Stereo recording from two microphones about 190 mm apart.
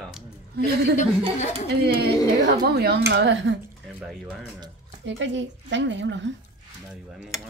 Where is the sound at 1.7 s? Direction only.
60° right (ahead or behind).